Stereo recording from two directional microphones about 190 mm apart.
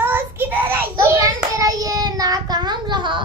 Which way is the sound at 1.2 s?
20° right (ahead or behind).